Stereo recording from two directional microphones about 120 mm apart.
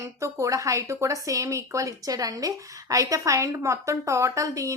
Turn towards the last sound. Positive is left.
turn(degrees=-25)  # may be behind; listen again after turning